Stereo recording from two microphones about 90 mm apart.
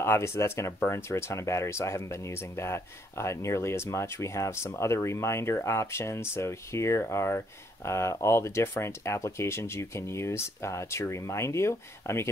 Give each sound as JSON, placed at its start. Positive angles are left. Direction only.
{"t": 0.0, "sound": "speech", "side_deg": 30}